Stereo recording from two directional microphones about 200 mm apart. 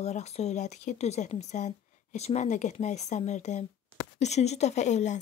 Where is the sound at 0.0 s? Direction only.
35° left (ahead or behind).